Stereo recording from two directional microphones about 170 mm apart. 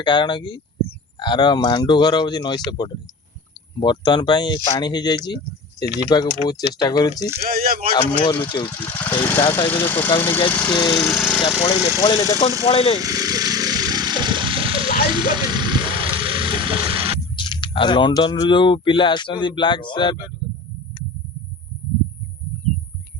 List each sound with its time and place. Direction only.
0.0 s speech: 25° left (ahead or behind)
7.4 s speech: 60° right (ahead or behind)
8.2 s speech: 25° left (ahead or behind)
8.6 s speech: 15° left (ahead or behind)
11.9 s speech: 20° left (ahead or behind)
12.6 s speech: 35° left (ahead or behind)
13.0 s a sound: 20° right (ahead or behind)
15.1 s vehicle: 25° right (ahead or behind)
17.3 s speech: 30° left (ahead or behind)